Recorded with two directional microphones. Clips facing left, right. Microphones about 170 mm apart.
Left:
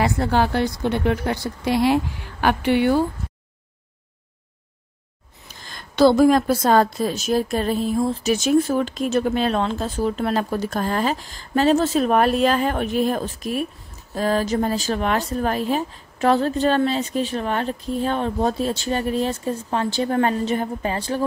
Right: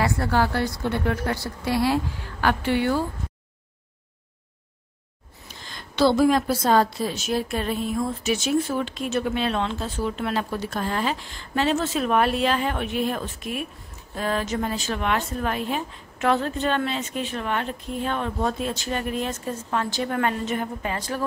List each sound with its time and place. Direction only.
0.0 s a woman's voice: 20° left (ahead or behind)
5.7 s a woman's voice: 45° left (ahead or behind); by 21.2 s 30° left (ahead or behind)